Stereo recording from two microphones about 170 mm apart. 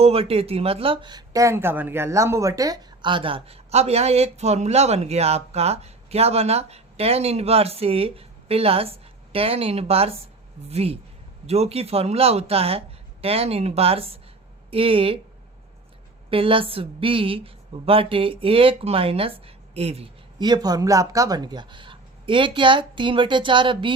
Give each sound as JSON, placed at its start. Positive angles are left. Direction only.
{"t": 0.0, "sound": "speech", "side_deg": -35}
{"t": 16.3, "sound": "speech", "side_deg": -30}
{"t": 20.4, "sound": "speech", "side_deg": -25}